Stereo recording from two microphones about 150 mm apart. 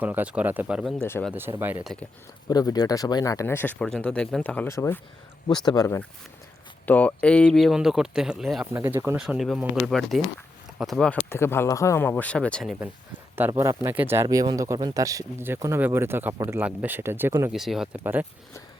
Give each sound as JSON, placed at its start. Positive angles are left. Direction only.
{"t": 0.0, "sound": "speech", "side_deg": -10}
{"t": 2.5, "sound": "speech", "side_deg": 25}
{"t": 5.5, "sound": "speech", "side_deg": 25}
{"t": 6.8, "sound": "speech", "side_deg": 10}
{"t": 8.7, "sound": "speech", "side_deg": -15}
{"t": 9.1, "sound": "speech", "side_deg": -5}
{"t": 11.3, "sound": "speech", "side_deg": 15}
{"t": 13.5, "sound": "speech", "side_deg": -20}
{"t": 17.5, "sound": "speech", "side_deg": 0}
{"t": 18.0, "sound": "speech", "side_deg": -10}